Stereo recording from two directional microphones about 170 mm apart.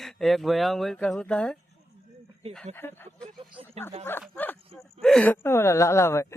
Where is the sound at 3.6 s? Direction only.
30° right (ahead or behind).